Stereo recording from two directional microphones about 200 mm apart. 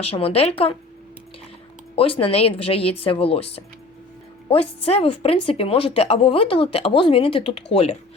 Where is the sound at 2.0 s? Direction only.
30° left (ahead or behind).